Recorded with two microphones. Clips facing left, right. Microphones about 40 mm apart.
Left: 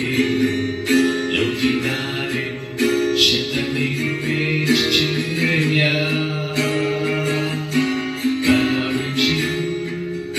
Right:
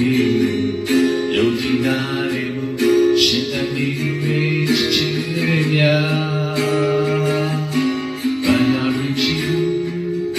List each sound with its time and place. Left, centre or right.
0.3 s music: left
2.8 s music: left
6.6 s music: left